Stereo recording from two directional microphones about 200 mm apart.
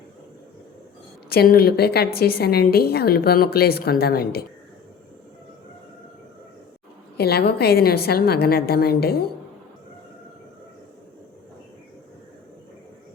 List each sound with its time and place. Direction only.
1.3 s a woman's voice: 50° left (ahead or behind)
7.2 s a woman's voice: 50° left (ahead or behind)